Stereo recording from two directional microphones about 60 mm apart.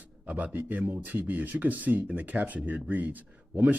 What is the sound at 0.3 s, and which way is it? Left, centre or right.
Speech, right.